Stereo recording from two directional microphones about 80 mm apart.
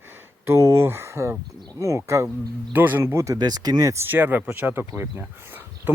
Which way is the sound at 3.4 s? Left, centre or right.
Right.